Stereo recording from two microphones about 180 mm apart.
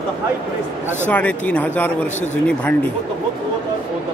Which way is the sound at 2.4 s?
5° left (ahead or behind).